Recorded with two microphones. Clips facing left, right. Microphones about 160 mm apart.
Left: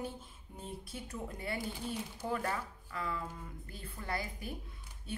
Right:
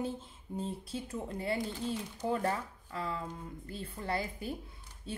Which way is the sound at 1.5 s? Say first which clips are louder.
Right 4 dB; 10° left (ahead or behind).